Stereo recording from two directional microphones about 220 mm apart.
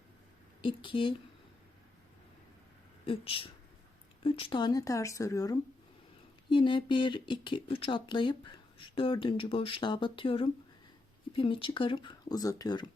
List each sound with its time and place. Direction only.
0.6 s speech: 20° left (ahead or behind)
3.1 s speech: 25° left (ahead or behind)